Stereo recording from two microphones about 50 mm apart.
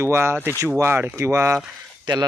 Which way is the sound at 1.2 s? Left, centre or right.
Right.